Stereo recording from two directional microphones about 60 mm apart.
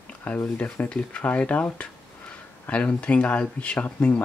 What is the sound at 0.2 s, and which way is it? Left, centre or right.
Speech, left.